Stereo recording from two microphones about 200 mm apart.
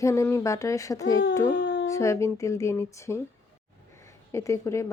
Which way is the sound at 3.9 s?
15° left (ahead or behind).